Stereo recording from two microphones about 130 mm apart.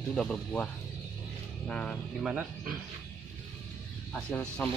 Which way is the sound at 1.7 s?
5° left (ahead or behind).